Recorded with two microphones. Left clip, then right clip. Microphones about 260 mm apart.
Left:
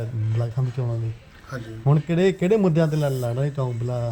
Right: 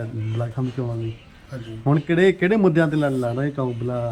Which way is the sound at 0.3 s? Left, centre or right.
Left.